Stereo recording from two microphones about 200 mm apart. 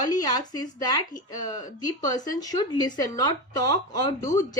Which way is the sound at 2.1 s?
20° left (ahead or behind).